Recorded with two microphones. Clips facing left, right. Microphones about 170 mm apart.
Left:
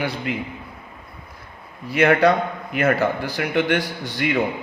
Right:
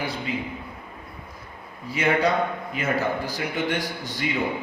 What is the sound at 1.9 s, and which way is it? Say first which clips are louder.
A man's voice: left 6 dB; 65° left (ahead or behind).